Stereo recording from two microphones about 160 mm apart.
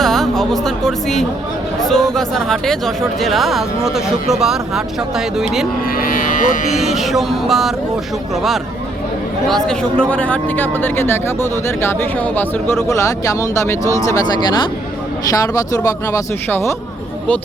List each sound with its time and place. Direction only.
0.0 s a woman's voice: centre (ahead or behind)
5.8 s cattle: 65° left (ahead or behind)
6.7 s speech: centre (ahead or behind); by 14.2 s 20° left (ahead or behind)
15.3 s speech: 20° left (ahead or behind)